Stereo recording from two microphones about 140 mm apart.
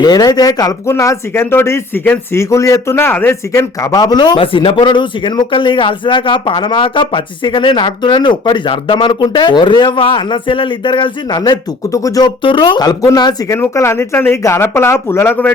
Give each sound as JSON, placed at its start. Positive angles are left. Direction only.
{"t": 0.0, "sound": "speech", "side_deg": 30}
{"t": 12.4, "sound": "speech", "side_deg": 35}